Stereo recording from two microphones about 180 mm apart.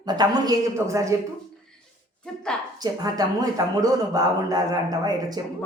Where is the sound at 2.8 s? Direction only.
20° right (ahead or behind).